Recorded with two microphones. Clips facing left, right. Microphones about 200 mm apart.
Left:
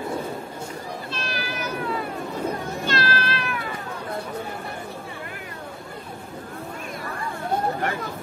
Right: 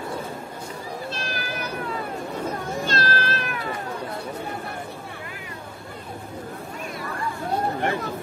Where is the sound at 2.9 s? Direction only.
45° right (ahead or behind).